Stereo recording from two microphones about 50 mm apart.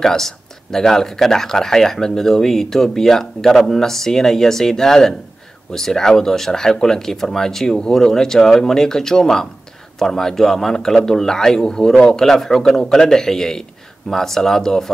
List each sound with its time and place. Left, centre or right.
0.0 s speech: centre